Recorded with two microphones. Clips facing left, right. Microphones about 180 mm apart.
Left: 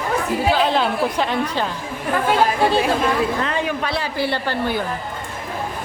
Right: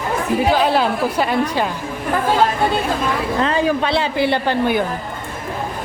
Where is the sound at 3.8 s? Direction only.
25° right (ahead or behind).